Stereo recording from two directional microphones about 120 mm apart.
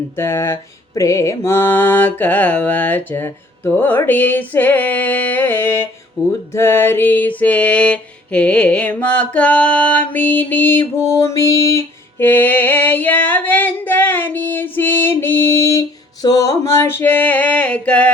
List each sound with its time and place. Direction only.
0.2 s mantra: 25° left (ahead or behind)
6.2 s music: 25° left (ahead or behind)
6.5 s mantra: 20° left (ahead or behind)
11.2 s female singing: 25° left (ahead or behind)